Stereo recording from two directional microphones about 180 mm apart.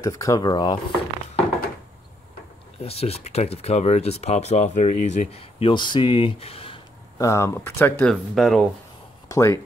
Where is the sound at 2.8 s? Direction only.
35° left (ahead or behind).